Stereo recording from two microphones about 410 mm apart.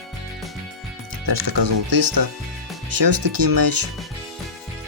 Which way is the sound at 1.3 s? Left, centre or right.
Right.